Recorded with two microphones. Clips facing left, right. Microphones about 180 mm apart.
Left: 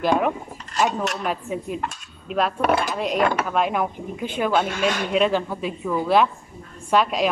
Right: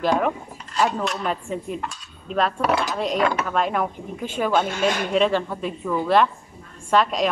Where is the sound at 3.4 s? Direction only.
5° left (ahead or behind).